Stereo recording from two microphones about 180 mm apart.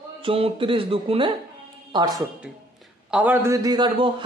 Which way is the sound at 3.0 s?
5° right (ahead or behind).